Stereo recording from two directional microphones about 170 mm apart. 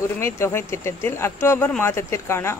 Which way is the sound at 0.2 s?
15° left (ahead or behind).